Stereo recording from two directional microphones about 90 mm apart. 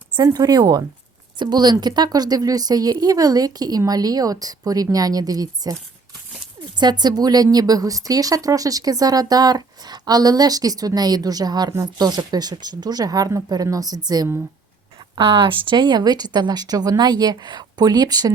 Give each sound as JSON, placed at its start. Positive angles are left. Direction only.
{"t": 0.3, "sound": "a woman's voice", "side_deg": -45}
{"t": 6.7, "sound": "a woman's voice", "side_deg": -55}
{"t": 15.1, "sound": "a woman's voice", "side_deg": -70}